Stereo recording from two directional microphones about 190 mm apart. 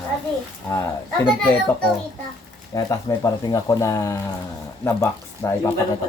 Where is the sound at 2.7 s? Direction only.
15° left (ahead or behind).